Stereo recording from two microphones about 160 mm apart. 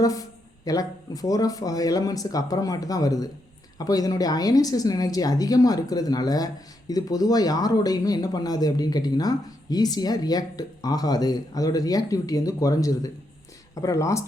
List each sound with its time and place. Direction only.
0.0 s a woman's voice: 20° left (ahead or behind)